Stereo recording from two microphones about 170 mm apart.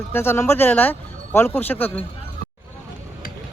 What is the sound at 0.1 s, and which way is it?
Speech, 15° left (ahead or behind).